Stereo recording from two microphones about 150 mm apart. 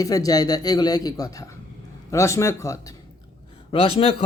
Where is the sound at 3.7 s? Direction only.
35° left (ahead or behind).